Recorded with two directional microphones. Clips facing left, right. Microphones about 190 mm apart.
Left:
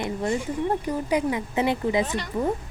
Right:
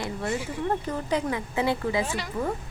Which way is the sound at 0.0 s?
20° left (ahead or behind).